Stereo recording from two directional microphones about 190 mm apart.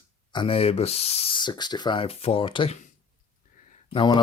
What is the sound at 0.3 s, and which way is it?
Speech, 30° left (ahead or behind).